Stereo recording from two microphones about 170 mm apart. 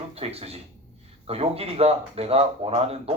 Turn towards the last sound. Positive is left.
turn(degrees=-35)  # may be behind; listen again after turning